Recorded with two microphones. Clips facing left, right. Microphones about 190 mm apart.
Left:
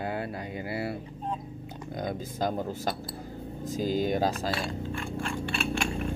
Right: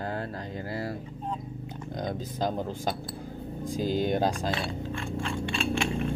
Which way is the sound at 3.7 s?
45° left (ahead or behind).